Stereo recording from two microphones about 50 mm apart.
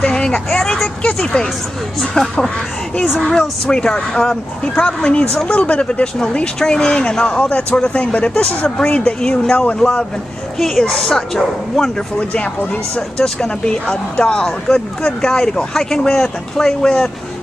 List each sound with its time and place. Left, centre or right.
0.0 s vehicle: centre
1.0 s speech: centre
12.2 s speech: left